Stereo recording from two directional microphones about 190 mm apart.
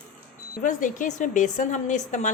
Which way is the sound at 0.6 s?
45° left (ahead or behind).